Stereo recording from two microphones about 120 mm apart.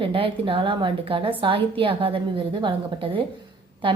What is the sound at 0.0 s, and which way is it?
A woman's voice, 45° right (ahead or behind).